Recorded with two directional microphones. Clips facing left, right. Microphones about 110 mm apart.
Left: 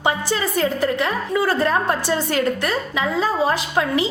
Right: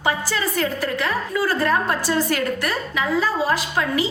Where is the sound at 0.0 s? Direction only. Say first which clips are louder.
Left 2 dB; 25° left (ahead or behind).